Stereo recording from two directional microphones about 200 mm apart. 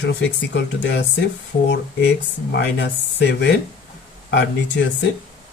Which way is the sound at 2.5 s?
60° left (ahead or behind).